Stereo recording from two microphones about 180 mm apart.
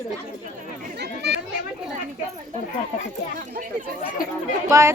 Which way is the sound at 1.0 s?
70° right (ahead or behind).